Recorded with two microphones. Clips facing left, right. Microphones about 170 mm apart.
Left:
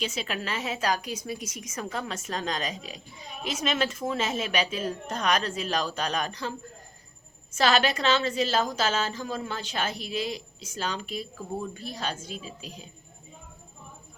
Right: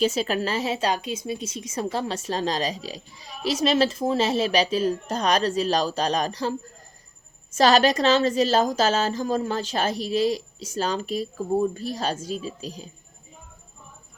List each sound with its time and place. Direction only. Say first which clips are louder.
0.0 s a woman's voice: right 9 dB; 40° right (ahead or behind)
7.5 s a woman's voice: right 6 dB; 40° right (ahead or behind)